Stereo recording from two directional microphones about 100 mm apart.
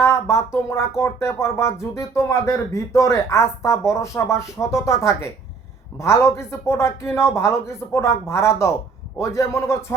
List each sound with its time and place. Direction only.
0.0 s speech: 30° left (ahead or behind)